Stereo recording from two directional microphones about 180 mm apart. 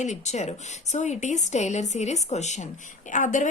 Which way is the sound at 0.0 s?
40° left (ahead or behind).